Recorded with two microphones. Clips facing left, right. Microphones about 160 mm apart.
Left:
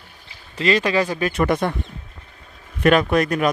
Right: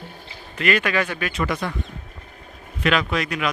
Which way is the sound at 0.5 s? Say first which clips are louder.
Left 3 dB; 30° left (ahead or behind).